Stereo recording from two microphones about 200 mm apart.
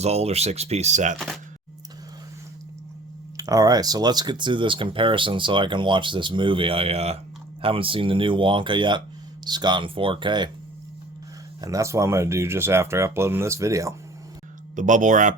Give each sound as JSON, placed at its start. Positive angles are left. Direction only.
{"t": 0.0, "sound": "speech", "side_deg": -30}
{"t": 3.3, "sound": "speech", "side_deg": -15}
{"t": 11.6, "sound": "speech", "side_deg": -15}
{"t": 14.8, "sound": "speech", "side_deg": -40}